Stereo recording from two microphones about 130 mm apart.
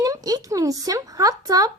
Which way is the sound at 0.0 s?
30° right (ahead or behind).